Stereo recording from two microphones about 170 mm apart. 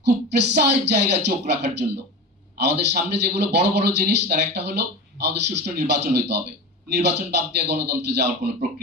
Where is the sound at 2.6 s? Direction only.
80° right.